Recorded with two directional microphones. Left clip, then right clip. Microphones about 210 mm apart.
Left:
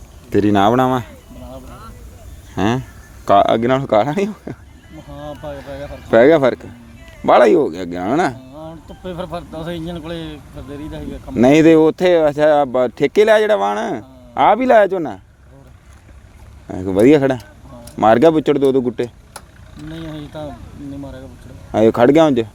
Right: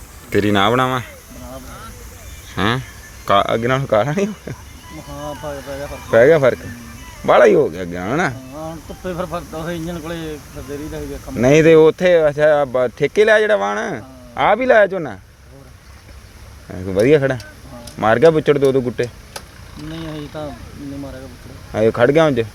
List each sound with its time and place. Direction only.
0.3 s speech: 30° left (ahead or behind)
2.6 s speech: 35° left (ahead or behind)
5.1 s speech: 25° left (ahead or behind)
6.1 s speech: 45° left (ahead or behind)
8.5 s speech: 25° left (ahead or behind); by 15.2 s 45° left (ahead or behind)
16.7 s speech: 45° left (ahead or behind)
19.9 s speech: 25° left (ahead or behind)
21.7 s speech: 40° left (ahead or behind)